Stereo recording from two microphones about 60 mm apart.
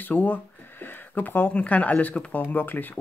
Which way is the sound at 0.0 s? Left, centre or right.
Left.